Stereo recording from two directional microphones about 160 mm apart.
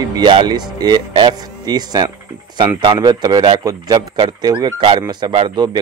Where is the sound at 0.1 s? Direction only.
30° right (ahead or behind).